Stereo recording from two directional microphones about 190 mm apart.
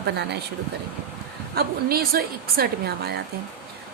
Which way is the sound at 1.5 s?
55° right (ahead or behind).